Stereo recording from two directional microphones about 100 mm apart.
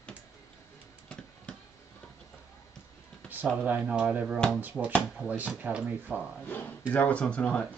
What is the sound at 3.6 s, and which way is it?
Speech, 10° right (ahead or behind).